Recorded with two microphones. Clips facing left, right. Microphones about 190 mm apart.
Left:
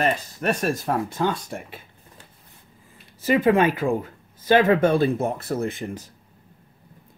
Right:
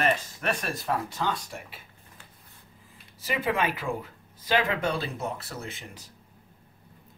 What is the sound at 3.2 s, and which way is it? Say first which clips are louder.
Speech: left 10 dB; 45° left (ahead or behind).